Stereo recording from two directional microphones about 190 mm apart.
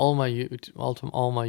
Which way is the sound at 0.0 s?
20° left (ahead or behind).